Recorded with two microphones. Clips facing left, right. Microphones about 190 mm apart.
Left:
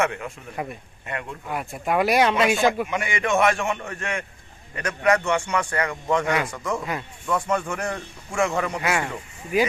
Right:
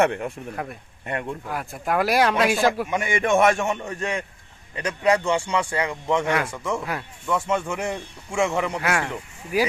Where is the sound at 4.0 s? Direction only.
35° right (ahead or behind).